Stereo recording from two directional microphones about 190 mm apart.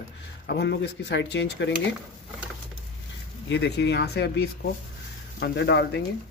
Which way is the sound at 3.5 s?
60° left (ahead or behind).